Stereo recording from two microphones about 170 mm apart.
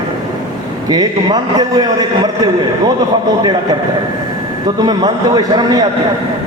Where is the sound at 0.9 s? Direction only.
20° right (ahead or behind).